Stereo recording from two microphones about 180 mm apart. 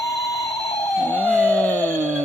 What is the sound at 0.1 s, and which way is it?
Emergency vehicle, 20° left (ahead or behind).